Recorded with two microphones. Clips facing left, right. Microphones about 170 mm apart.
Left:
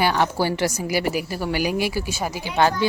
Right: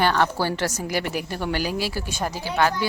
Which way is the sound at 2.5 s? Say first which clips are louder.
Left 3 dB; 25° left (ahead or behind).